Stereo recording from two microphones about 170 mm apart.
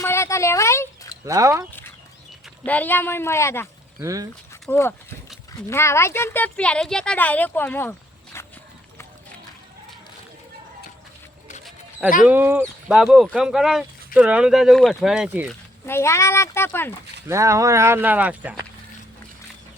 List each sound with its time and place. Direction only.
0.0 s a sound: 15° left (ahead or behind)
1.2 s speech: 20° right (ahead or behind)
2.6 s speech: 10° left (ahead or behind)
4.0 s speech: 20° right (ahead or behind)
4.7 s speech: 15° left (ahead or behind)
11.6 s a sound: 5° right (ahead or behind)
12.3 s speech: 10° right (ahead or behind)
12.9 s speech: centre (ahead or behind)
15.9 s speech: 15° left (ahead or behind)
17.2 s speech: 20° right (ahead or behind)